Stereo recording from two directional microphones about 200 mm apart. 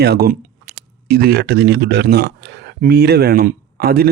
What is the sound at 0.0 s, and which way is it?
Speech, 50° right (ahead or behind).